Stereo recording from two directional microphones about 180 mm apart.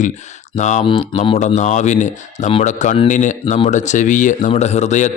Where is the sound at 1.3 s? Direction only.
40° left (ahead or behind).